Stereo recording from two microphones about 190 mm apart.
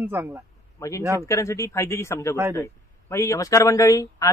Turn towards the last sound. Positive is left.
turn(degrees=15)  # may be behind; listen again after turning